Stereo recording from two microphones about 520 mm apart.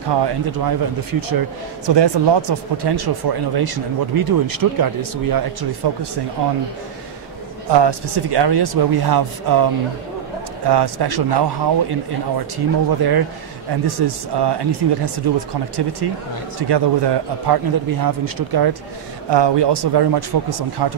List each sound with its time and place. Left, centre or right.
0.1 s speech: right
1.9 s speech: right
7.6 s speech: right
10.7 s speech: right